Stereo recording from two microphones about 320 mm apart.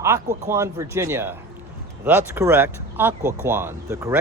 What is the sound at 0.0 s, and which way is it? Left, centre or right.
Speech, centre.